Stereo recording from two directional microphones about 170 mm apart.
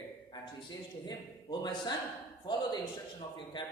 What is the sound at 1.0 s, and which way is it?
Speech, 25° left (ahead or behind).